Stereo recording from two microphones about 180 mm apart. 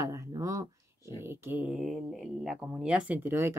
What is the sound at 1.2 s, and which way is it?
Speech, 15° right (ahead or behind).